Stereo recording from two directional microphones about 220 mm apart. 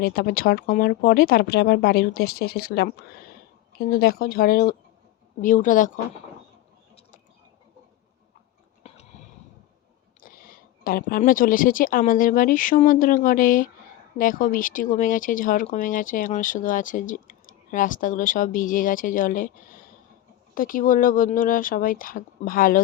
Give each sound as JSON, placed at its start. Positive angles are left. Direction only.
{"t": 0.0, "sound": "speech", "side_deg": 45}
{"t": 8.8, "sound": "a sound", "side_deg": 30}
{"t": 10.2, "sound": "speech", "side_deg": 40}